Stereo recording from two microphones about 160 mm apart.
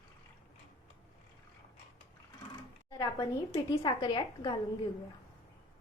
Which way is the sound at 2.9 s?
20° left (ahead or behind).